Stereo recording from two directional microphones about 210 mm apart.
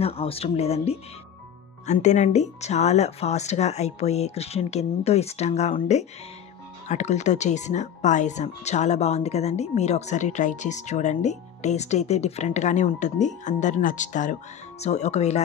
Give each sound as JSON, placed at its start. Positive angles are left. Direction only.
{"t": 0.0, "sound": "speech", "side_deg": 30}